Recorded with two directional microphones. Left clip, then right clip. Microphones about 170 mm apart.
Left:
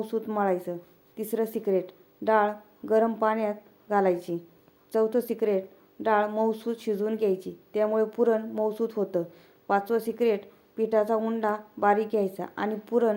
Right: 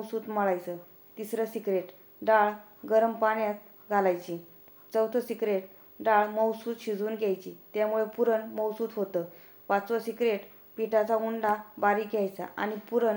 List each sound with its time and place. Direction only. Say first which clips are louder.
0.0 s a woman's voice: left 2 dB; 40° left (ahead or behind)